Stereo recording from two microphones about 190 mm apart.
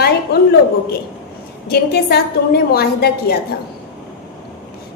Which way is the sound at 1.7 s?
55° left (ahead or behind).